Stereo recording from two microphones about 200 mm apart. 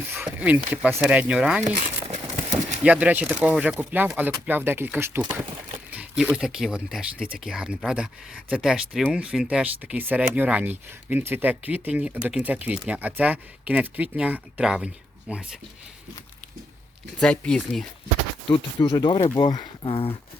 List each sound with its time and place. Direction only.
0.1 s speech: 10° right (ahead or behind)
1.6 s crumpling: 40° right (ahead or behind)
2.8 s speech: 5° right (ahead or behind)
17.2 s speech: 5° left (ahead or behind)
18.8 s speech: 25° left (ahead or behind)